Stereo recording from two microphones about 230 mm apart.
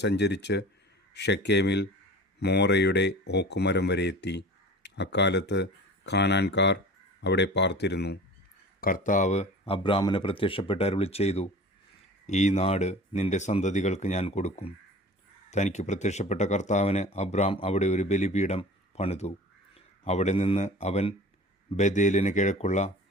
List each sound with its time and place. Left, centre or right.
0.0 s speech: left